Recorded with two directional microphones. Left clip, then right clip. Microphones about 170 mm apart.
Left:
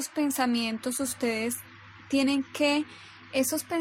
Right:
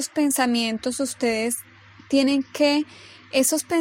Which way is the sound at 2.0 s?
30° right (ahead or behind).